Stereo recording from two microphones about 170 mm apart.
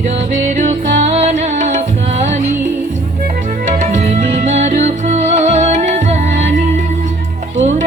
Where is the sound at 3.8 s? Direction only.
40° right (ahead or behind).